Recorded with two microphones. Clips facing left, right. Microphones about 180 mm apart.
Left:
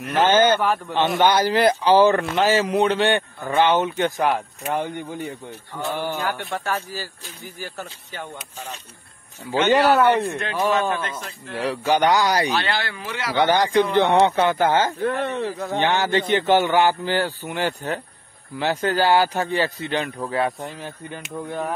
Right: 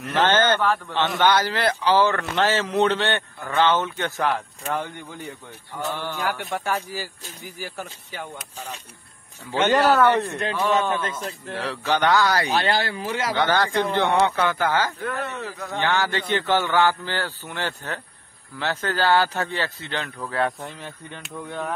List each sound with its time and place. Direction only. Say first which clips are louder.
0.0 s a man's voice: left 3 dB; 10° left (ahead or behind)
5.9 s a man's voice: left 4 dB; 15° left (ahead or behind)
6.5 s speech: even; 15° right (ahead or behind)
9.5 s a man's voice: left 2 dB; 10° left (ahead or behind)
11.5 s a man's voice: left 4 dB; 10° left (ahead or behind)
12.5 s speech: right 2 dB; 40° right (ahead or behind)
13.4 s a man's voice: left 5 dB; 15° left (ahead or behind); by 15.7 s 35° left (ahead or behind)
15.7 s a man's voice: left 3 dB; 20° left (ahead or behind)